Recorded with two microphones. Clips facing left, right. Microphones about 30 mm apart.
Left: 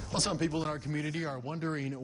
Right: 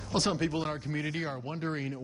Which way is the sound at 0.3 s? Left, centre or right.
Centre.